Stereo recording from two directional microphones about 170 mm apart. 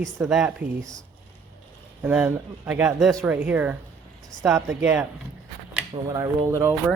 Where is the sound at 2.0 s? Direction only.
10° right (ahead or behind).